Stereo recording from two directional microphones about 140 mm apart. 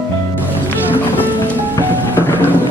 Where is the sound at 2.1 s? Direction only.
15° left (ahead or behind).